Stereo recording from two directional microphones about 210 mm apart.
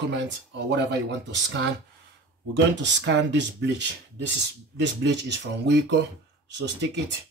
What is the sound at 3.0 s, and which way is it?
Speech, 55° right (ahead or behind).